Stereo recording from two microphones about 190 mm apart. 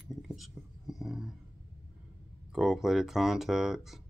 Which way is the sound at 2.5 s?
Centre (ahead or behind).